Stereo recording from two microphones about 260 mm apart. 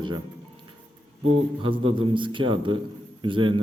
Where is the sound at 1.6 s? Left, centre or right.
Centre.